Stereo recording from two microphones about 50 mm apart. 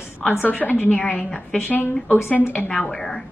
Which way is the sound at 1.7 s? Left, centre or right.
Left.